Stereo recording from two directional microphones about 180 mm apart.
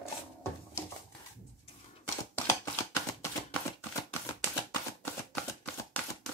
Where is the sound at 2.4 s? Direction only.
15° left (ahead or behind).